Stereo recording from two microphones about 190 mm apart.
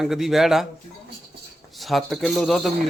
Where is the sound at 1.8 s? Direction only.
Centre (ahead or behind).